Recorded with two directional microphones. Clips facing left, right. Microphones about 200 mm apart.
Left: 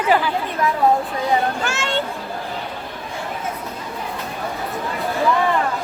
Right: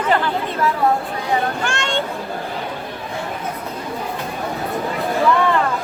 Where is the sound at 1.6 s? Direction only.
5° left (ahead or behind).